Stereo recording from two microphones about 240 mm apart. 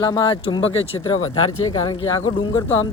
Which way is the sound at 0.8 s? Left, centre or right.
Left.